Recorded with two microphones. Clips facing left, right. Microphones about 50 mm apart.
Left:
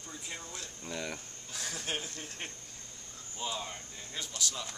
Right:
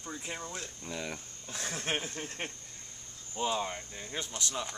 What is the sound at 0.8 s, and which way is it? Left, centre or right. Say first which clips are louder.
Speech: left 1 dB; centre.